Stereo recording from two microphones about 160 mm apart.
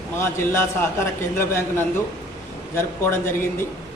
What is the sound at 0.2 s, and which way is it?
A man's voice, 15° left (ahead or behind).